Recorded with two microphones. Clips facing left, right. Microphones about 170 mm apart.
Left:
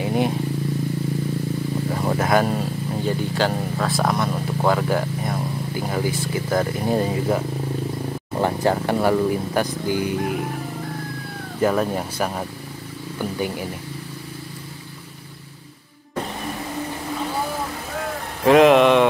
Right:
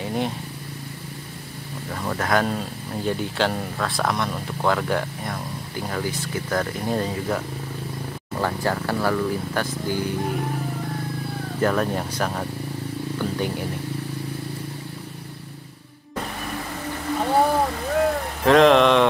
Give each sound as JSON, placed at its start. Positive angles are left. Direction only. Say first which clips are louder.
{"t": 0.0, "sound": "vehicle", "louder": "left 4 dB", "side_deg": 10}
{"t": 2.0, "sound": "speech", "louder": "left 2 dB", "side_deg": 15}
{"t": 11.6, "sound": "speech", "louder": "left 2 dB", "side_deg": 10}
{"t": 18.4, "sound": "speech", "louder": "left 2 dB", "side_deg": 5}